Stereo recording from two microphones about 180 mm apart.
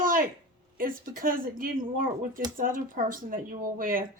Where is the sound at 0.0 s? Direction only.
50° right (ahead or behind).